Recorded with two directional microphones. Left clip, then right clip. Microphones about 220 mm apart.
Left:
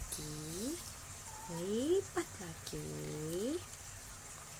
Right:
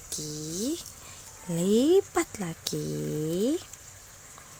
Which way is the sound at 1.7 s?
50° right (ahead or behind).